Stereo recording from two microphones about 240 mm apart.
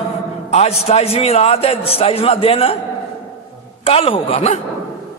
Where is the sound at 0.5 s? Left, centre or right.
Left.